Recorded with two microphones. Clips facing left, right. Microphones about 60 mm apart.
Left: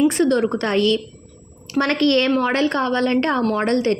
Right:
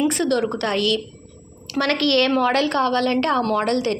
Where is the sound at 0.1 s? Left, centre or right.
Left.